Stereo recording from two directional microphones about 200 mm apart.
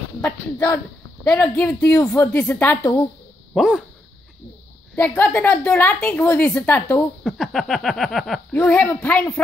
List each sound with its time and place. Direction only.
0.2 s a woman's voice: 10° left (ahead or behind)
4.9 s a woman's voice: 10° left (ahead or behind)
7.2 s speech: centre (ahead or behind)